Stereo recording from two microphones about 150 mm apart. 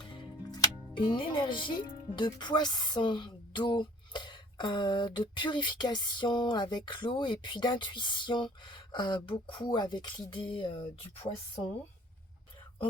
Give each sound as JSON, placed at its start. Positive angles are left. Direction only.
{"t": 0.1, "sound": "speech", "side_deg": 30}